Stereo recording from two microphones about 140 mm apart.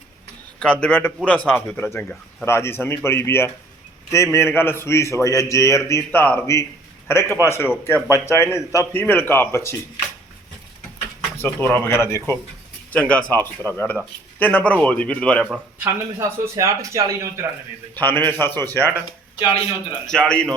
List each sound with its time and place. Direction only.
0.6 s a man's voice: 5° left (ahead or behind)
11.3 s speech: 15° left (ahead or behind)
15.4 s speech: 15° right (ahead or behind)
17.9 s speech: 15° left (ahead or behind)
20.1 s a man's voice: 5° left (ahead or behind)